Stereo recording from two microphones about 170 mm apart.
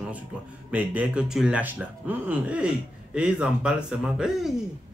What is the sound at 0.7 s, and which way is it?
Speech, 10° right (ahead or behind).